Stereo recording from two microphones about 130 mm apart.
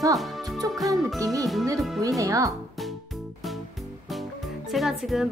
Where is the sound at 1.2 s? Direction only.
25° right (ahead or behind).